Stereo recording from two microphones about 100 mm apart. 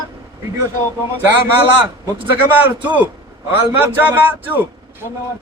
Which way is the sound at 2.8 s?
15° right (ahead or behind).